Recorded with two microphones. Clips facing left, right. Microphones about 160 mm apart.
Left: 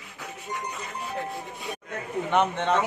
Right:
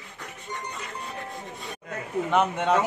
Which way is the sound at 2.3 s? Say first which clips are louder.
Right 1 dB; 5° right (ahead or behind).